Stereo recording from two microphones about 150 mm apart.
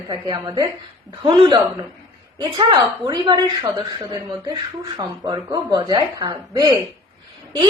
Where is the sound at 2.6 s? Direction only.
30° right (ahead or behind).